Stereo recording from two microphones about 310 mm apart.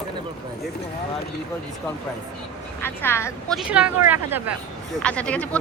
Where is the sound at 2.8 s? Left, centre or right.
Centre.